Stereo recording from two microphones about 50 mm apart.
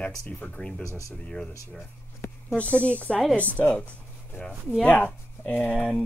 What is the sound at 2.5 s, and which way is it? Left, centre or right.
Speech, left.